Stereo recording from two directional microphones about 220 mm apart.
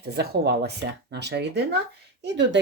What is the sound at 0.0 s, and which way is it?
Speech, 45° right (ahead or behind).